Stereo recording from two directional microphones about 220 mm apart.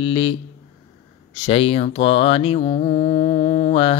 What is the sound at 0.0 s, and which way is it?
Mantra, 20° left (ahead or behind).